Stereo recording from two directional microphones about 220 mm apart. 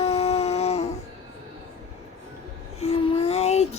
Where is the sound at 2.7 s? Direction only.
25° left (ahead or behind).